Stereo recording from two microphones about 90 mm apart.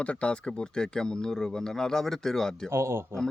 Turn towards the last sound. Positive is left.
turn(degrees=-30)  # may be behind; listen again after turning